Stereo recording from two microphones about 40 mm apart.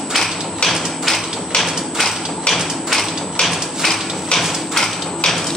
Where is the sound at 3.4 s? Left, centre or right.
Centre.